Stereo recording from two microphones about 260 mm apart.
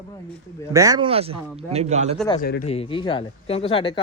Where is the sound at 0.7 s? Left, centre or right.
Centre.